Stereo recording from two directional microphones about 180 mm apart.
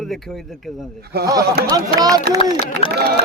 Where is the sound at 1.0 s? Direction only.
60° right (ahead or behind).